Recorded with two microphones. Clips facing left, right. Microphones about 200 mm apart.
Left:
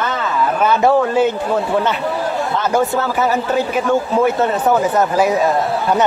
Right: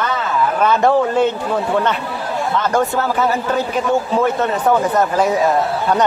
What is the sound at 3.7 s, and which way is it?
Speech, 5° left (ahead or behind).